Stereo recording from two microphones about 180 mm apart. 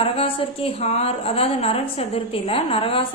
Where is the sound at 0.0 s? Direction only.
30° left (ahead or behind).